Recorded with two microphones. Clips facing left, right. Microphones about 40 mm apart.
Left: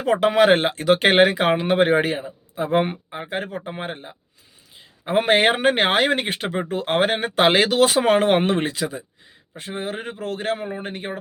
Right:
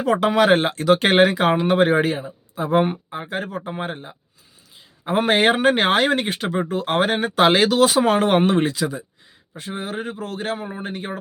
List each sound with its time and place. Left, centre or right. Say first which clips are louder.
0.0 s speech: left 1 dB; left